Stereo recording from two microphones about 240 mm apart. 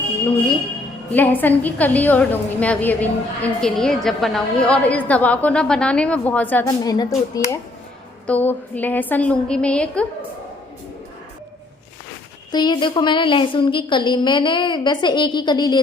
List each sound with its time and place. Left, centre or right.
1.1 s a woman's voice: centre
8.3 s a woman's voice: centre
12.5 s a woman's voice: centre